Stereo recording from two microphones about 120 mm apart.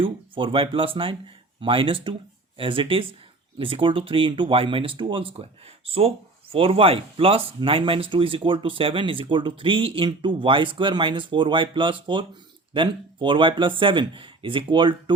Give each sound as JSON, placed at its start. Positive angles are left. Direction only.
{"t": 0.0, "sound": "speech", "side_deg": -45}